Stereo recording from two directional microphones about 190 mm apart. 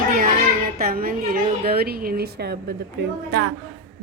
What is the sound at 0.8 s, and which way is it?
A woman's voice, 50° right (ahead or behind).